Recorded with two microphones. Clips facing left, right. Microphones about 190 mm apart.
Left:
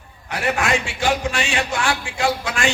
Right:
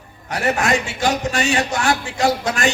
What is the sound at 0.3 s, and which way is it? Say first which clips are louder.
A man's voice: right 2 dB; 40° right (ahead or behind).